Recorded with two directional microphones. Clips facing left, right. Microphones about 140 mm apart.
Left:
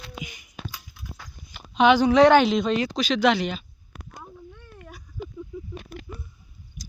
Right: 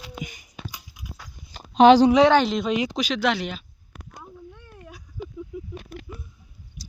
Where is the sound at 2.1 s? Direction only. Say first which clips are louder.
Left 1 dB; centre (ahead or behind).